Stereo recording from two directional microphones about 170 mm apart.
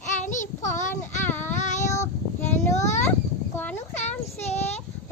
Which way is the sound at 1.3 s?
10° left (ahead or behind).